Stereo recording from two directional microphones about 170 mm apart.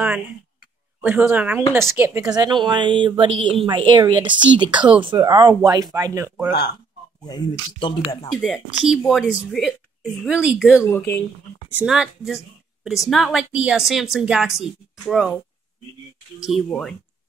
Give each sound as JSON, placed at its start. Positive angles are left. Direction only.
{"t": 1.0, "sound": "speech", "side_deg": -10}
{"t": 7.2, "sound": "speech", "side_deg": 25}
{"t": 8.4, "sound": "a woman's voice", "side_deg": 0}
{"t": 10.9, "sound": "speech", "side_deg": 10}
{"t": 11.7, "sound": "a woman's voice", "side_deg": -5}
{"t": 16.3, "sound": "a woman's voice", "side_deg": 0}